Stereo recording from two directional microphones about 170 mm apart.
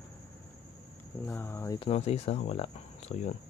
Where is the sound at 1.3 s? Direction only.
15° left (ahead or behind).